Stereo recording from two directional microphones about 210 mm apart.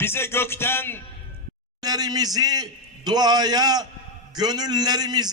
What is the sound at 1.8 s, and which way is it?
A man's voice, 20° right (ahead or behind).